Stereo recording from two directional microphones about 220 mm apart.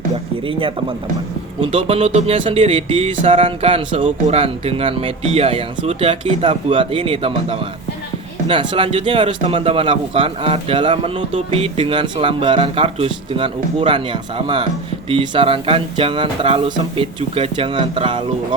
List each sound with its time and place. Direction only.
0.4 s a man's voice: 25° right (ahead or behind)